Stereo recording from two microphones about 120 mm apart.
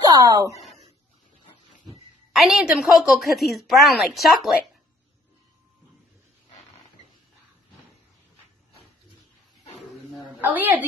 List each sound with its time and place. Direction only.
0.0 s a sound: 30° right (ahead or behind)
2.3 s a woman's voice: 5° right (ahead or behind)
10.4 s a woman's voice: 15° right (ahead or behind)